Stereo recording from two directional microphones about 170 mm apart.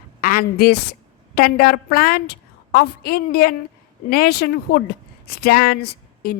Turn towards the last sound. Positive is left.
turn(degrees=65)  # may be behind; listen again after turning